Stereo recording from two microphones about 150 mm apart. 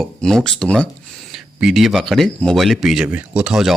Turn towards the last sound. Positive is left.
turn(degrees=-5)  # may be behind; listen again after turning